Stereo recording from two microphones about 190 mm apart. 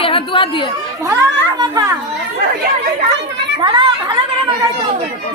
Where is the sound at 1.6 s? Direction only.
20° right (ahead or behind).